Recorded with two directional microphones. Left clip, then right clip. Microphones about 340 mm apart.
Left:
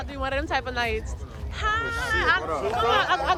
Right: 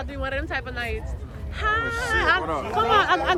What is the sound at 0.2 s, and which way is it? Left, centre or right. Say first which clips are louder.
Speech: left 2 dB; centre.